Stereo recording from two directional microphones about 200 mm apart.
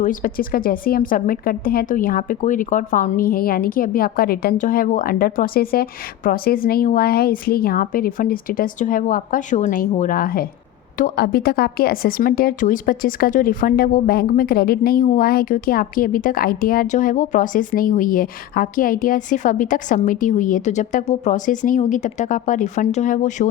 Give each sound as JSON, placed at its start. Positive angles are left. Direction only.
{"t": 0.0, "sound": "a woman's voice", "side_deg": 40}